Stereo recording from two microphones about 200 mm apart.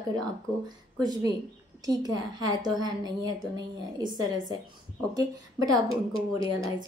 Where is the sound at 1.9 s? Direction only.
20° right (ahead or behind).